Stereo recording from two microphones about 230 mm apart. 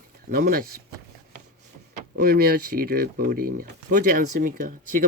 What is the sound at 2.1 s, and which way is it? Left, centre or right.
Speech, right.